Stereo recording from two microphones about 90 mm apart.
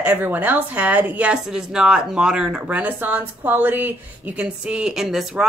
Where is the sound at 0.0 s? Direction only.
20° right (ahead or behind).